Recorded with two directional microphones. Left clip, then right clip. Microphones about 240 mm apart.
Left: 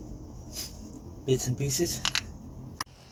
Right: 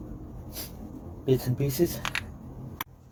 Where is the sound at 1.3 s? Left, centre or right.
Right.